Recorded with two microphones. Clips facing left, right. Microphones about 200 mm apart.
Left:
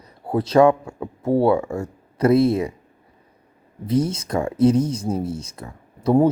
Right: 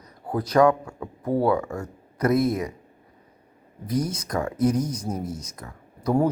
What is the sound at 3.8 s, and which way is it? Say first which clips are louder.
Speech: left 5 dB; 25° left (ahead or behind).